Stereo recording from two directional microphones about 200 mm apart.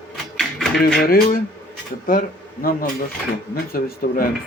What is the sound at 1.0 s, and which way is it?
Speech, 45° left (ahead or behind).